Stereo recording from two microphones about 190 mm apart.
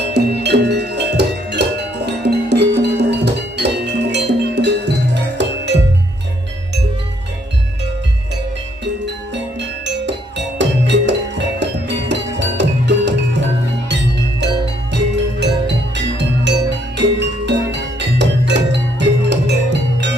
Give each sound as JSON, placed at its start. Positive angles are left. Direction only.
{"t": 0.1, "sound": "music", "side_deg": -60}
{"t": 9.0, "sound": "music", "side_deg": -65}